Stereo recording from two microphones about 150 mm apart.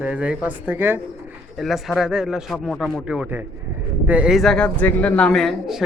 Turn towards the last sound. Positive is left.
turn(degrees=0)  # may be behind; listen again after turning